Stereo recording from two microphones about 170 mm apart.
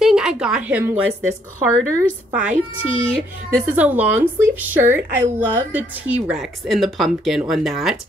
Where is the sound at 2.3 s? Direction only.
10° right (ahead or behind).